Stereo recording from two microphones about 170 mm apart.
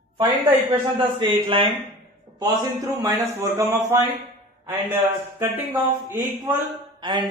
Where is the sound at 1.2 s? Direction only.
30° right (ahead or behind).